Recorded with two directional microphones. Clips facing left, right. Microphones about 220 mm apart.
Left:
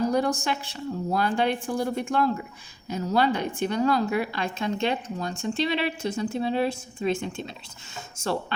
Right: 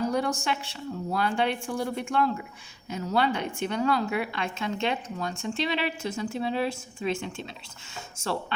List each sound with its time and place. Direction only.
0.0 s a woman's voice: 35° left (ahead or behind)